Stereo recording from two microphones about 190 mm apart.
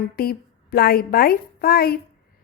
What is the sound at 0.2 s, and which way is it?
A woman's voice, 55° left (ahead or behind).